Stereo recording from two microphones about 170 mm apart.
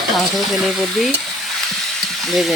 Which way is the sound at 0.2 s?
Centre (ahead or behind).